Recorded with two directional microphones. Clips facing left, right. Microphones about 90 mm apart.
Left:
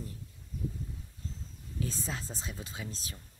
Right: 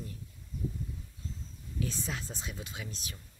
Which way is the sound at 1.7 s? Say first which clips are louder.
Right 1 dB; 35° left (ahead or behind).